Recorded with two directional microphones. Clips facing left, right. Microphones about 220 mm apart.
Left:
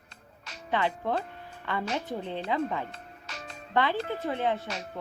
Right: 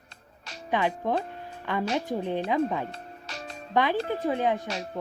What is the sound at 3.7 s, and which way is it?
Speech, 15° right (ahead or behind).